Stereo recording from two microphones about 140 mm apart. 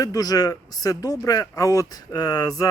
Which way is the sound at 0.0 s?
25° left (ahead or behind).